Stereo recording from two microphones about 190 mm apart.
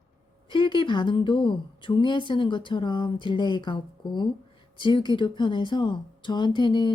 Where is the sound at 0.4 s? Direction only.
25° left (ahead or behind).